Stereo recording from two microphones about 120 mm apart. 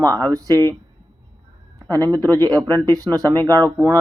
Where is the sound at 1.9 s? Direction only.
30° right (ahead or behind).